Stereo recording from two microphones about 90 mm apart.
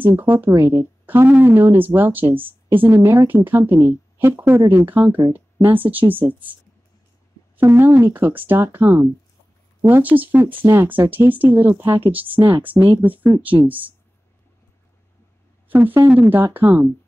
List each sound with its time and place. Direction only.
0.0 s speech: 20° right (ahead or behind)
7.5 s speech: 25° right (ahead or behind)
12.3 s speech: 80° right
13.0 s speech: 20° right (ahead or behind)
15.7 s speech: 25° right (ahead or behind)